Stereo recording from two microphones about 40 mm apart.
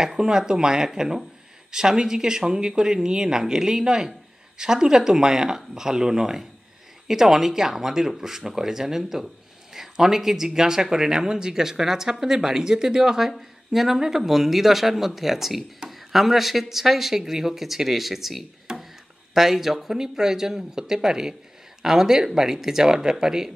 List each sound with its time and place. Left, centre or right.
0.0 s speech: centre
18.7 s a sound: centre
19.3 s speech: centre